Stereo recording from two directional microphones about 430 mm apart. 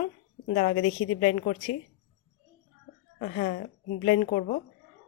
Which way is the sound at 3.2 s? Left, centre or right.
Centre.